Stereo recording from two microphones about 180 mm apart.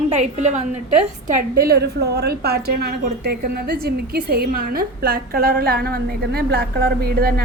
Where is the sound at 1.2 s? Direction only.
55° right (ahead or behind).